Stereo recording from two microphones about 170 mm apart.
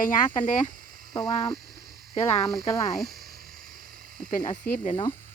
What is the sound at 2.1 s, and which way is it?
Speech, 35° left (ahead or behind).